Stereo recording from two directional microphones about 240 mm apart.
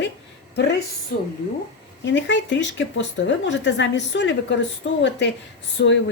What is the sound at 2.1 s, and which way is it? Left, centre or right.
A woman's voice, left.